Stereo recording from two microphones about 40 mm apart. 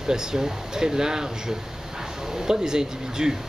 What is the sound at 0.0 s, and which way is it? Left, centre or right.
Speech, centre.